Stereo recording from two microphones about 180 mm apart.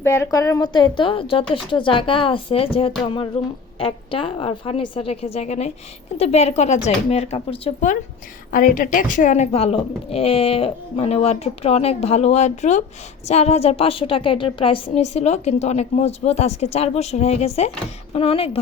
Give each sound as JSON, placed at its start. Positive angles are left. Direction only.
{"t": 0.0, "sound": "a woman's voice", "side_deg": 15}
{"t": 8.4, "sound": "a woman's voice", "side_deg": 50}